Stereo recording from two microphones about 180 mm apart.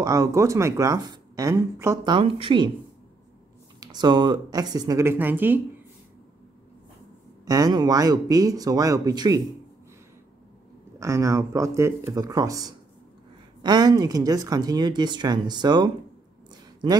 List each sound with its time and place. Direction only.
0.0 s speech: 20° right (ahead or behind)
2.1 s speech: 30° right (ahead or behind)
3.8 s speech: 25° right (ahead or behind)
7.4 s speech: 20° right (ahead or behind)
11.0 s speech: 15° right (ahead or behind)